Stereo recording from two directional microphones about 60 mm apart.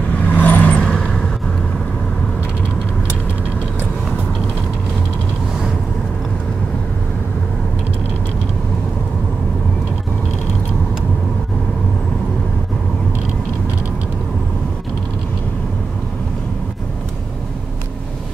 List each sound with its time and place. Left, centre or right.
0.3 s vehicle: left
0.8 s vehicle: centre